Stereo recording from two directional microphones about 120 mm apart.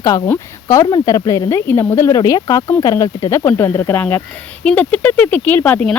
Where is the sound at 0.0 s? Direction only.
30° left (ahead or behind).